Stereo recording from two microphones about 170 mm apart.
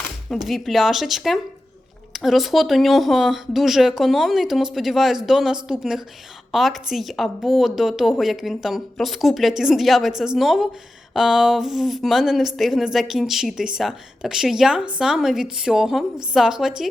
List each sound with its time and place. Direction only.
0.3 s speech: centre (ahead or behind)